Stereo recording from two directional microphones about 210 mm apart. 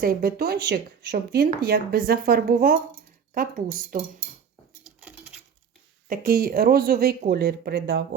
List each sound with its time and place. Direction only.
0.0 s speech: 45° right (ahead or behind)
4.9 s patter: 5° right (ahead or behind)
6.1 s speech: 45° right (ahead or behind)